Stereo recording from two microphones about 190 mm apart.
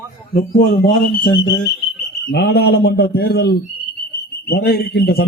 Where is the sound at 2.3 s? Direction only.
60° left (ahead or behind).